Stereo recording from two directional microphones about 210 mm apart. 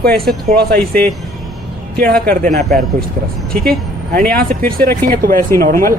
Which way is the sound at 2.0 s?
45° right (ahead or behind).